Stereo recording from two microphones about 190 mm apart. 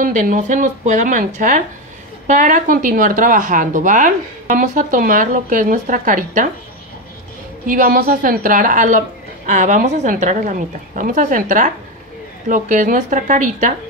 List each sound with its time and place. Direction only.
0.0 s a woman's voice: 45° right (ahead or behind)
7.6 s a woman's voice: 50° right (ahead or behind)